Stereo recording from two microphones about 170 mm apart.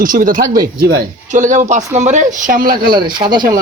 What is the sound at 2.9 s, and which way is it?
Speech, 25° right (ahead or behind).